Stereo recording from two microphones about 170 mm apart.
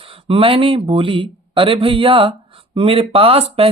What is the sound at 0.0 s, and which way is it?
Speech, 30° right (ahead or behind).